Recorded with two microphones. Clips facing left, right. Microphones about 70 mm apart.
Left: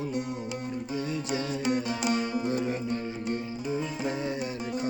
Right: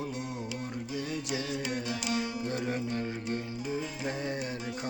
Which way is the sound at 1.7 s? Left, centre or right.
Left.